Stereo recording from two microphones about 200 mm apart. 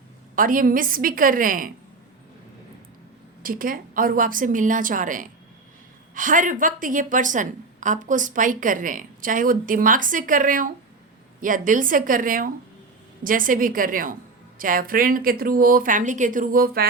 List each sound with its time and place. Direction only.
0.3 s speech: 45° right (ahead or behind)
3.4 s a woman's voice: 45° right (ahead or behind)